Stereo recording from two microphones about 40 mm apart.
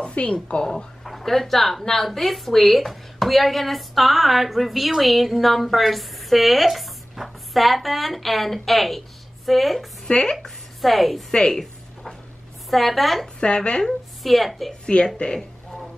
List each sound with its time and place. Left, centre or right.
0.0 s a woman's voice: left
1.0 s speech: centre
10.0 s speech: left
10.8 s speech: centre
11.3 s speech: centre
12.6 s speech: centre
13.4 s a woman's voice: left
13.8 s a woman's voice: centre
14.9 s a woman's voice: left